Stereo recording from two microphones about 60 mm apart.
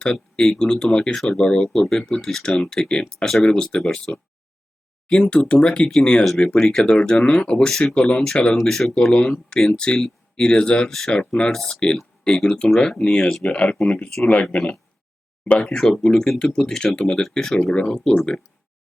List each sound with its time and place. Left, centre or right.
0.0 s speech: centre
5.3 s speech: centre
7.9 s speech: centre
8.6 s speech: centre
15.6 s speech: centre